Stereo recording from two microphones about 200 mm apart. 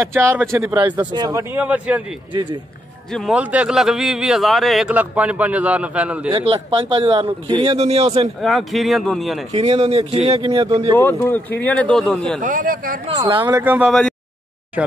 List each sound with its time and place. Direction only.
0.0 s a man's voice: 15° right (ahead or behind)
3.1 s a man's voice: centre (ahead or behind)
6.3 s speech: 25° right (ahead or behind)
8.4 s a man's voice: centre (ahead or behind)
9.5 s speech: 30° right (ahead or behind)
11.0 s speech: 10° left (ahead or behind)
12.4 s speech: 40° right (ahead or behind)
13.0 s speech: 25° right (ahead or behind)
13.4 s a man's voice: 15° right (ahead or behind)